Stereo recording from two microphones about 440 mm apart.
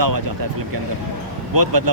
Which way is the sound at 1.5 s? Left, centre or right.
Right.